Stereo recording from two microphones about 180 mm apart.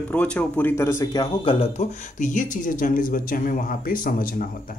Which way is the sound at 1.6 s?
40° left (ahead or behind).